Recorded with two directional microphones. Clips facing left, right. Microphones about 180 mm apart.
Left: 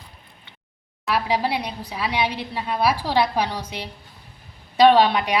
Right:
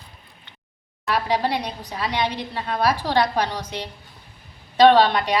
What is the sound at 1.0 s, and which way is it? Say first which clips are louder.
A woman's voice: even; 10° left (ahead or behind).